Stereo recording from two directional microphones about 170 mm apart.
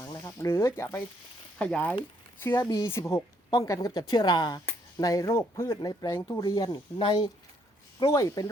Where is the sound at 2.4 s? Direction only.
20° left (ahead or behind).